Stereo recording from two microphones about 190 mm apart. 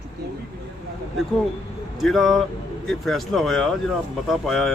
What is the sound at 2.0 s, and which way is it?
Speech, centre (ahead or behind).